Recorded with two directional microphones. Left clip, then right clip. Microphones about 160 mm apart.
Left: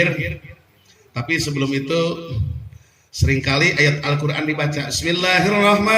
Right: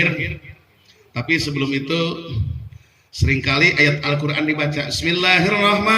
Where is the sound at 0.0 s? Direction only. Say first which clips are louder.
Even; 35° right (ahead or behind).